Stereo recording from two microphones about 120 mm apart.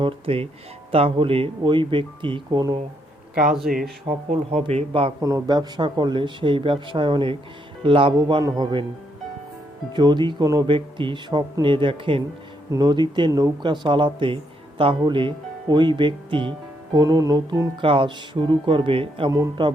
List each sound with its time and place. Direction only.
0.0 s speech: 55° right (ahead or behind); by 2.8 s 35° right (ahead or behind)
3.5 s speech: 5° right (ahead or behind)
4.6 s a man's voice: 60° right (ahead or behind)
4.9 s speech: 45° right (ahead or behind)
5.2 s speech: 30° right (ahead or behind)
9.9 s speech: 40° right (ahead or behind)
10.8 s speech: 45° right (ahead or behind)
12.7 s speech: 35° right (ahead or behind)
16.9 s speech: 35° right (ahead or behind)